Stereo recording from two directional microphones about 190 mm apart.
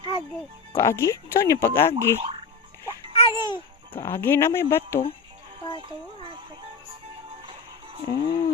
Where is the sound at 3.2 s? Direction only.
25° left (ahead or behind).